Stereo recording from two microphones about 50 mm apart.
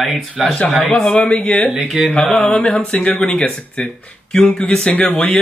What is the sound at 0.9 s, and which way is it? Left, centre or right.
Speech, left.